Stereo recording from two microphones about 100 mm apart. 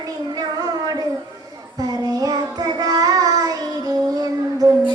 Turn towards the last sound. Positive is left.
turn(degrees=-35)  # may be behind; listen again after turning